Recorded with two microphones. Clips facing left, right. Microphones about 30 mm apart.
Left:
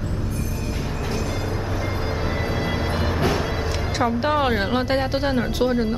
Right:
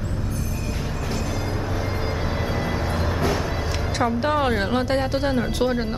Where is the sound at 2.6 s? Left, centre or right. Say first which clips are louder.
Left 1 dB; centre.